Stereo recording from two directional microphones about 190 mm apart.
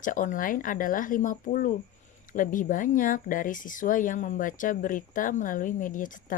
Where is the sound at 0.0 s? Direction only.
45° left (ahead or behind).